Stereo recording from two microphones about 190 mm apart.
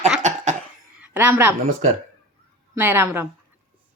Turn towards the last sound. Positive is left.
turn(degrees=-10)  # may be behind; listen again after turning